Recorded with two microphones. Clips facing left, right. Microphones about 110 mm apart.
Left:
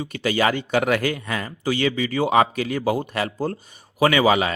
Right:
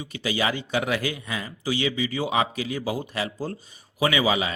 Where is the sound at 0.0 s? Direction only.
55° left (ahead or behind).